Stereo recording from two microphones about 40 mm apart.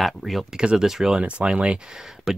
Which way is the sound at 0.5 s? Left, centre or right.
Centre.